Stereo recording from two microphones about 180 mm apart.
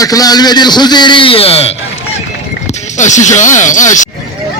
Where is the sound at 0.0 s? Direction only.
20° left (ahead or behind).